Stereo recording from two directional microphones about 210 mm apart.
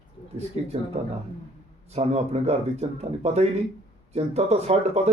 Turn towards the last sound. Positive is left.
turn(degrees=-30)  # may be behind; listen again after turning